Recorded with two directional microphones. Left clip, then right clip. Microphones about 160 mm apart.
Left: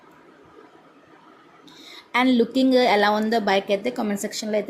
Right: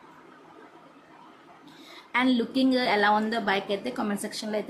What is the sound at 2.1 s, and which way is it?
A woman's voice, 25° left (ahead or behind).